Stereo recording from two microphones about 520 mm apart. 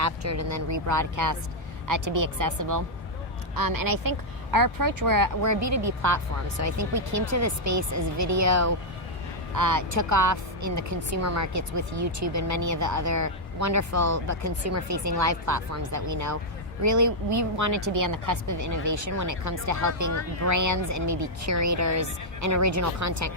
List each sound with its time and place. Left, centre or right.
0.0 s a woman's voice: right